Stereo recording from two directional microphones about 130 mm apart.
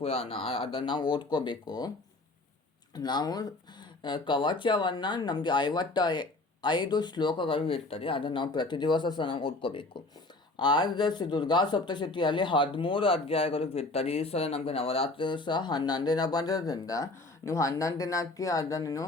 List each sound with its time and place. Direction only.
0.0 s speech: 45° left (ahead or behind)
2.9 s speech: 35° left (ahead or behind)